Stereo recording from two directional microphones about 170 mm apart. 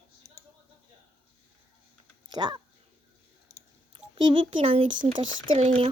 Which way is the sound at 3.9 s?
30° right (ahead or behind).